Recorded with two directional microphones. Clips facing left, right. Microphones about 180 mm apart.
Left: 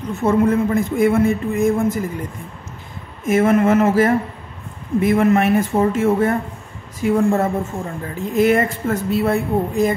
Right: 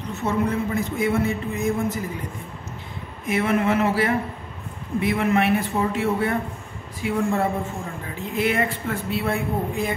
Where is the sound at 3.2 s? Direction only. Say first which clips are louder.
Left 7 dB; 45° left (ahead or behind).